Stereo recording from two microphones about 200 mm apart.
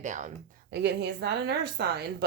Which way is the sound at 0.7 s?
60° right (ahead or behind).